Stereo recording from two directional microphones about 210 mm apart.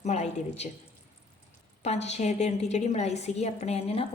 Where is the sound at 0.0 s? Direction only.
30° left (ahead or behind).